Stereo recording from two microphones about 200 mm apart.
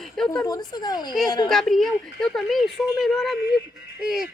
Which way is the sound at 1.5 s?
Centre (ahead or behind).